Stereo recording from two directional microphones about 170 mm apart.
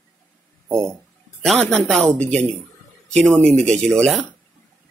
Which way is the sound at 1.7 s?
5° left (ahead or behind).